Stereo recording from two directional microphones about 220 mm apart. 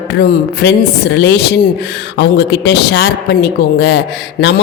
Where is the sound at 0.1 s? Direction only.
50° left (ahead or behind).